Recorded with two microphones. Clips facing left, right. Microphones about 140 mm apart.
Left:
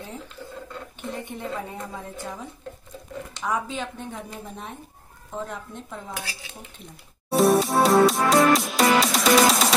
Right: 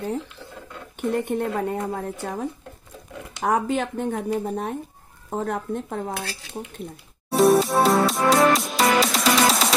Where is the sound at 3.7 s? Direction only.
60° right (ahead or behind).